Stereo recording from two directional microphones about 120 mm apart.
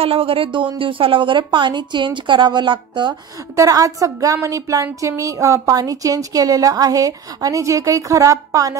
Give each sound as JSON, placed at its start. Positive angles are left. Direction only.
{"t": 0.0, "sound": "a woman's voice", "side_deg": -50}
{"t": 3.5, "sound": "a woman's voice", "side_deg": -30}